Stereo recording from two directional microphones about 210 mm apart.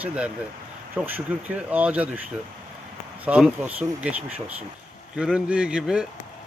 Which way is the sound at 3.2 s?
5° right (ahead or behind).